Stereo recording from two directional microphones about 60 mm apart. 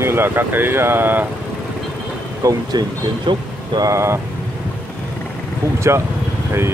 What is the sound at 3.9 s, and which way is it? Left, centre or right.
Speech, right.